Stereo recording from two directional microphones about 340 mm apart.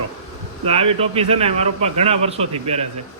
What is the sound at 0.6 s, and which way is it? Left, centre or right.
A man's voice, centre.